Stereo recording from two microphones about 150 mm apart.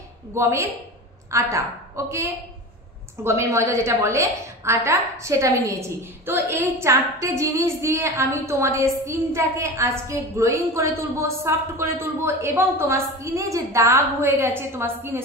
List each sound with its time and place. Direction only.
0.3 s a woman's voice: 20° right (ahead or behind)